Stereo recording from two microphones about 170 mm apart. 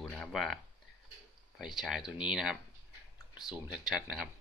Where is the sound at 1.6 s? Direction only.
Centre (ahead or behind).